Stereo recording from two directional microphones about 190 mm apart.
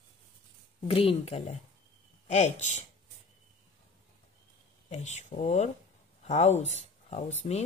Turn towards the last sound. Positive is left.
turn(degrees=35)  # may be behind; listen again after turning